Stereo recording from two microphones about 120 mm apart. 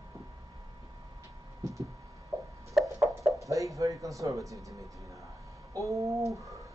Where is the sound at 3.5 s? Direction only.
25° right (ahead or behind).